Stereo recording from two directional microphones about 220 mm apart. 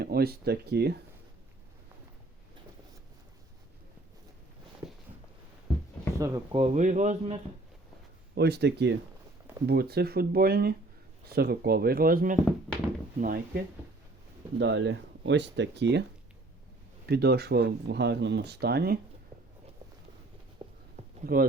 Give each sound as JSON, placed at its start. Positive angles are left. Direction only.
{"t": 0.0, "sound": "speech", "side_deg": -45}
{"t": 6.1, "sound": "speech", "side_deg": -15}
{"t": 6.6, "sound": "speech", "side_deg": -35}
{"t": 8.4, "sound": "speech", "side_deg": -50}
{"t": 14.6, "sound": "speech", "side_deg": -55}
{"t": 17.1, "sound": "speech", "side_deg": -45}
{"t": 20.6, "sound": "a sound", "side_deg": -25}
{"t": 20.9, "sound": "a sound", "side_deg": -35}